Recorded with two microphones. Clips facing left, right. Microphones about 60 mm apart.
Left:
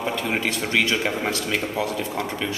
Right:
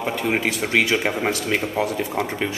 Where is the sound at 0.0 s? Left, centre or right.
Centre.